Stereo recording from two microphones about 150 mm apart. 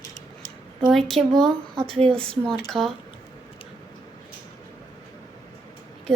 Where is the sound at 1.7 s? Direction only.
35° right (ahead or behind).